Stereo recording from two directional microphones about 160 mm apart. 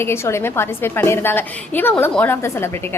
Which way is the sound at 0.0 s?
15° left (ahead or behind).